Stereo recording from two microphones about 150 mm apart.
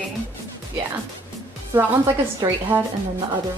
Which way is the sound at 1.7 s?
15° right (ahead or behind).